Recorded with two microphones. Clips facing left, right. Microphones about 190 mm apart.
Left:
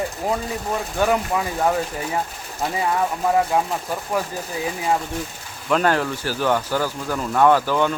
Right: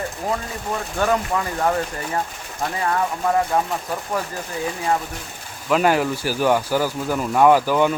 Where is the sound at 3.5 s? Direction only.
5° left (ahead or behind).